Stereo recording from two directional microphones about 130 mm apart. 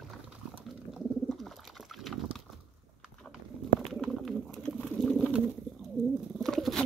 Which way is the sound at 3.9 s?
Centre (ahead or behind).